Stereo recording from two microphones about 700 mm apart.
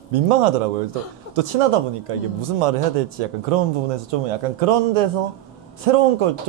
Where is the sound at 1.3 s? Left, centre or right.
Right.